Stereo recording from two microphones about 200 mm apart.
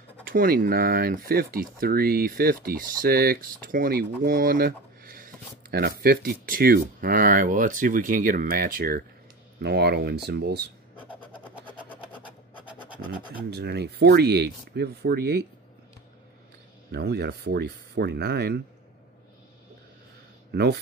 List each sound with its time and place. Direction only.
0.2 s speech: 45° right (ahead or behind)
11.1 s a sound: 25° left (ahead or behind)
12.6 s scratch: 5° right (ahead or behind)
13.5 s speech: 55° right (ahead or behind)
16.9 s speech: 55° right (ahead or behind)
20.5 s speech: 55° right (ahead or behind)